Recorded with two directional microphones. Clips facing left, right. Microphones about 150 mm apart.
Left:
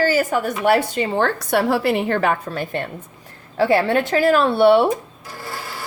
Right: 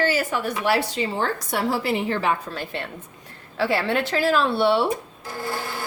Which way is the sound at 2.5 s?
45° left (ahead or behind).